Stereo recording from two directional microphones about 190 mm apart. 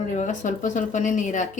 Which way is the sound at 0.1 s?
40° left (ahead or behind).